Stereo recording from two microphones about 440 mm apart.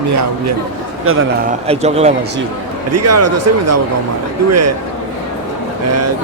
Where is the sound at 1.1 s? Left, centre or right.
Right.